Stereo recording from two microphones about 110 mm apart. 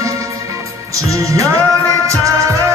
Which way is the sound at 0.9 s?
30° right (ahead or behind).